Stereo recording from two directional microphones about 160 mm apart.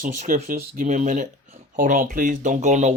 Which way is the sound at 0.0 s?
50° right (ahead or behind).